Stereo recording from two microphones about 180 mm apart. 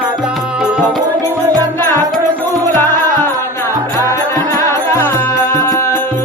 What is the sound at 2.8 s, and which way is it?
Music, 10° left (ahead or behind).